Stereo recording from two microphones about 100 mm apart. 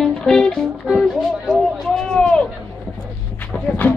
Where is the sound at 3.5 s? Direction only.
15° left (ahead or behind).